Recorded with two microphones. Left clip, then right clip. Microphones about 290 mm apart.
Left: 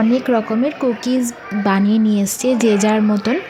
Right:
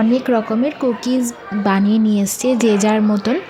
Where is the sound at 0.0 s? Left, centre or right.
Centre.